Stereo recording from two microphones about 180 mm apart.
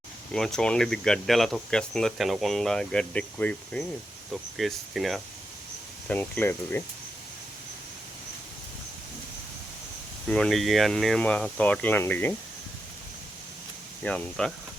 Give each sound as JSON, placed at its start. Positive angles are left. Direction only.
{"t": 0.3, "sound": "speech", "side_deg": 5}
{"t": 10.2, "sound": "speech", "side_deg": 5}
{"t": 14.0, "sound": "speech", "side_deg": 5}